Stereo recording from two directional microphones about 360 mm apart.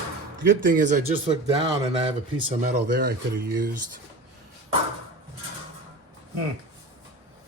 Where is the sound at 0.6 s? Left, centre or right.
Right.